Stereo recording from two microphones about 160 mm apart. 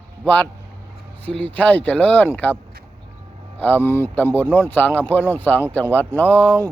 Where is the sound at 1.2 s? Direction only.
10° left (ahead or behind).